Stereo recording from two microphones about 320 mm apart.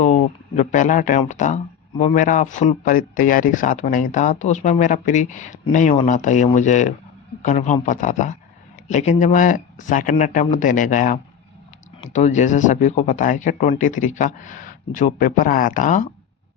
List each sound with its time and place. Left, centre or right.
0.0 s speech: left